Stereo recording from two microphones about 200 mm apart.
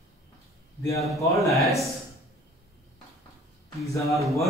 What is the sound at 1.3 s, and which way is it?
Speech, centre (ahead or behind).